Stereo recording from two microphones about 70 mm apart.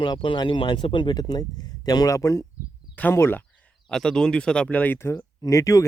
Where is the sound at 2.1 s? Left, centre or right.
Left.